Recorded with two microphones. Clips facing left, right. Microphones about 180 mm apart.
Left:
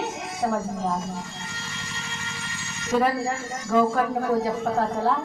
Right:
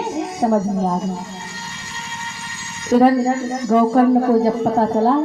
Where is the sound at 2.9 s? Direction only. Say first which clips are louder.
Right 10 dB; 40° right (ahead or behind).